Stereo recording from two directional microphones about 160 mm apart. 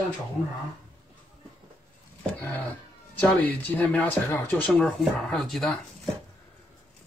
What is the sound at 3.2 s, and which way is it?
Speech, 10° left (ahead or behind).